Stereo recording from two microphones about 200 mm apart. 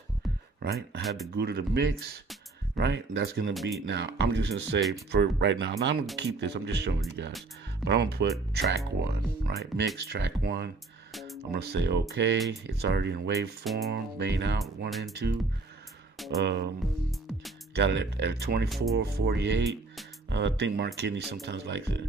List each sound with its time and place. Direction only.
0.6 s speech: 50° right (ahead or behind)
1.0 s speech: centre (ahead or behind)
1.3 s speech: 55° right (ahead or behind)
14.9 s speech: centre (ahead or behind)
16.4 s speech: 60° right (ahead or behind)
17.7 s speech: 60° right (ahead or behind)